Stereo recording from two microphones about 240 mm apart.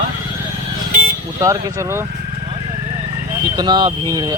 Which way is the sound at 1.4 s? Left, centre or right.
Centre.